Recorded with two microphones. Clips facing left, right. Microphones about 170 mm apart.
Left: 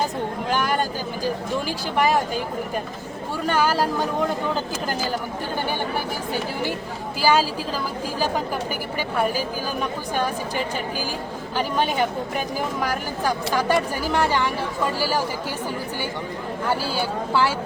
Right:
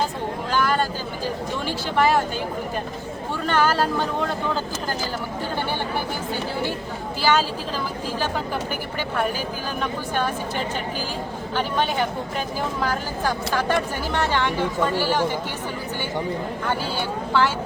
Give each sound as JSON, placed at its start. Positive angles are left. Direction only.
{"t": 0.5, "sound": "a sound", "side_deg": 15}
{"t": 1.6, "sound": "speech", "side_deg": 15}
{"t": 3.4, "sound": "speech", "side_deg": 10}
{"t": 7.2, "sound": "speech", "side_deg": 10}
{"t": 12.8, "sound": "speech", "side_deg": 10}
{"t": 16.6, "sound": "speech", "side_deg": 10}